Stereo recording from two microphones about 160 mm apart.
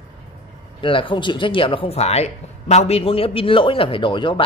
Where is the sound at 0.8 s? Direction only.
30° left (ahead or behind).